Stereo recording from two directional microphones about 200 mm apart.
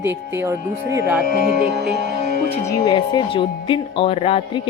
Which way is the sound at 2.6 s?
20° left (ahead or behind).